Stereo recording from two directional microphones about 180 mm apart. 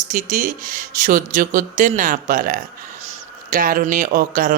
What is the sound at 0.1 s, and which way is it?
Speech, 45° right (ahead or behind).